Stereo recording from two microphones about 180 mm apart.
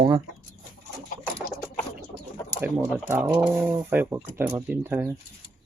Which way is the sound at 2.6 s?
5° right (ahead or behind).